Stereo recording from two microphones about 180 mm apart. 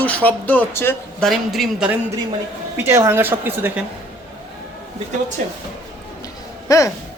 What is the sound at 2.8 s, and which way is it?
A woman's voice, 15° right (ahead or behind).